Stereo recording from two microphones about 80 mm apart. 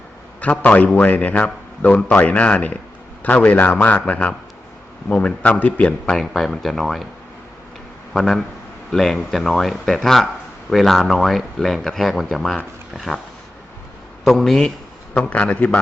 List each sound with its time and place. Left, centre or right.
0.4 s a man's voice: centre
6.1 s speech: centre
8.1 s speech: centre
14.3 s a man's voice: centre